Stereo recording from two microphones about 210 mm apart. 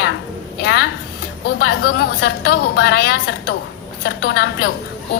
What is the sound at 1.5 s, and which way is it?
A woman's voice, 45° left (ahead or behind).